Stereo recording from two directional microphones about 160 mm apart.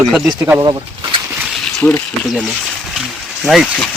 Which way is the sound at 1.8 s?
10° left (ahead or behind).